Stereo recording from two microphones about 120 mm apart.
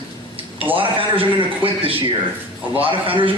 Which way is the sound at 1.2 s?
50° right (ahead or behind).